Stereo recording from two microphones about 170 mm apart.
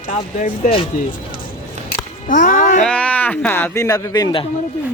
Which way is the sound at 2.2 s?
50° left (ahead or behind).